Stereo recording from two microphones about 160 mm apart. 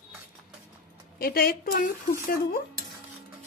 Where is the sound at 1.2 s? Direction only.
70° left (ahead or behind).